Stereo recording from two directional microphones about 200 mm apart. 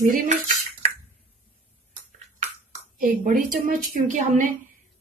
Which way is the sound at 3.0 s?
45° right (ahead or behind).